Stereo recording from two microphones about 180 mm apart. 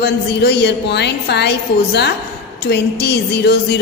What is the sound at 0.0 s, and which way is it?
A woman's voice, 70° left (ahead or behind).